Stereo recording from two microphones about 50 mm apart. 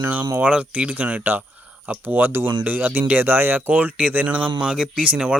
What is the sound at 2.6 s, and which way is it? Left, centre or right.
Speech, right.